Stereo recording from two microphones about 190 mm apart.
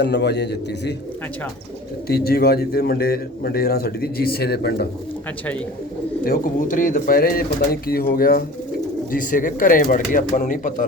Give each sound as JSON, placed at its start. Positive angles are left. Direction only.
{"t": 0.0, "sound": "a man's voice", "side_deg": 60}
{"t": 2.0, "sound": "a man's voice", "side_deg": 55}
{"t": 6.2, "sound": "speech", "side_deg": 45}